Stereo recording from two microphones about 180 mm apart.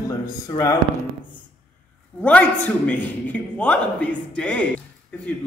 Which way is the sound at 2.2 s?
10° left (ahead or behind).